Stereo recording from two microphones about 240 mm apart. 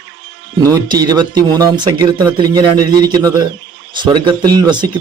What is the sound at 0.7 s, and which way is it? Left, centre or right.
Speech, centre.